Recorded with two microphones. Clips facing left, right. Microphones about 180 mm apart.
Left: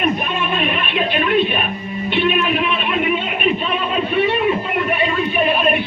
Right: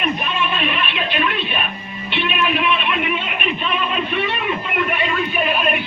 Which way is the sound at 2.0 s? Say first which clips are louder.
Left 4 dB; 40° left (ahead or behind).